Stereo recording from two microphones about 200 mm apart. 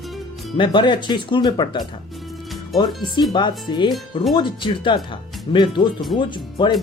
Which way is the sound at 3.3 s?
20° left (ahead or behind).